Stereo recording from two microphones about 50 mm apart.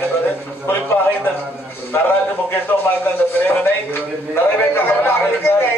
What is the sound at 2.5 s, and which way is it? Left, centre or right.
A man's voice, left.